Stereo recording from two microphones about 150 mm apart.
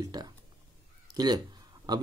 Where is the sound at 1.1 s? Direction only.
25° right (ahead or behind).